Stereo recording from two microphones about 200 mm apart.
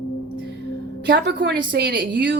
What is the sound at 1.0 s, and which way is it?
A woman's voice, 50° right (ahead or behind).